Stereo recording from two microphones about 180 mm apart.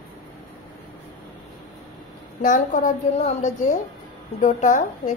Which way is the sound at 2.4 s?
45° left (ahead or behind).